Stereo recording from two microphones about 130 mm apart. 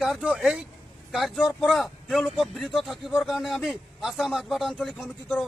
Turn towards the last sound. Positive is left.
turn(degrees=-5)  # may be behind; listen again after turning